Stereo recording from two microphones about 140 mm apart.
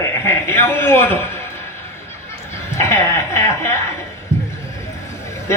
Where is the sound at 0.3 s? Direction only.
20° left (ahead or behind).